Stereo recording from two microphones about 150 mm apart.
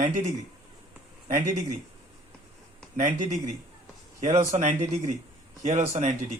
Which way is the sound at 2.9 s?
55° right (ahead or behind).